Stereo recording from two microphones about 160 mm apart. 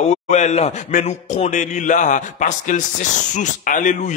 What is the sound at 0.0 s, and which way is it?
A man's voice, 45° left (ahead or behind).